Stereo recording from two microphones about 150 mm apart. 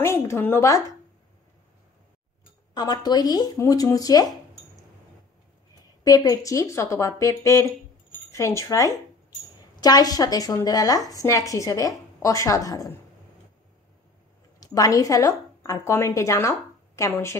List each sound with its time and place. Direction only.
0.0 s a woman's voice: 15° left (ahead or behind)
2.7 s speech: 25° left (ahead or behind)
6.0 s speech: 25° left (ahead or behind)
14.6 s a woman's voice: 20° left (ahead or behind)